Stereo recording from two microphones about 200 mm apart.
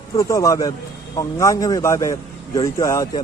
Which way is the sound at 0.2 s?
15° left (ahead or behind).